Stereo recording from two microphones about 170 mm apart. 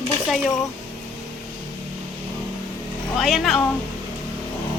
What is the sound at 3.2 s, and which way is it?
Speech, centre (ahead or behind).